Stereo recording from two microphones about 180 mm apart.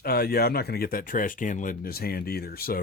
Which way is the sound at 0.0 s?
60° left (ahead or behind).